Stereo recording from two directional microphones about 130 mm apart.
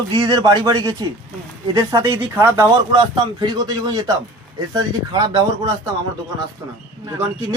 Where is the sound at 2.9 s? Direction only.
35° right (ahead or behind).